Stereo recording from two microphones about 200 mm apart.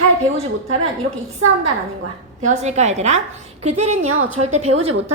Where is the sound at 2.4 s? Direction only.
35° right (ahead or behind).